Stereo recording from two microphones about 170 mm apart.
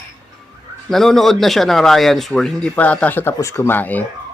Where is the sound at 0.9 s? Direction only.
Centre (ahead or behind).